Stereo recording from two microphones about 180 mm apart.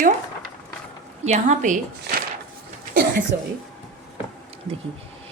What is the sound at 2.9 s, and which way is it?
Speech, 50° right (ahead or behind).